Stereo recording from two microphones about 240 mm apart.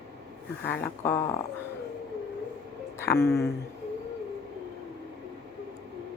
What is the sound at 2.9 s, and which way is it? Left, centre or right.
Speech, centre.